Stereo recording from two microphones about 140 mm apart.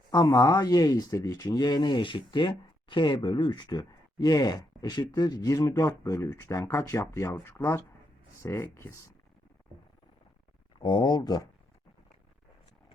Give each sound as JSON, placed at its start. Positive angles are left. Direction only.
{"t": 0.1, "sound": "speech", "side_deg": 25}
{"t": 10.8, "sound": "speech", "side_deg": 35}